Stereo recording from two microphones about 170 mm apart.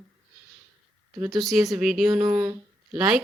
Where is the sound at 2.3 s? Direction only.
15° right (ahead or behind).